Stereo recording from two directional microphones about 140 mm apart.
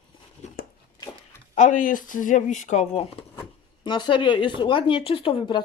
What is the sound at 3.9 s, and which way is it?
Speech, 35° left (ahead or behind).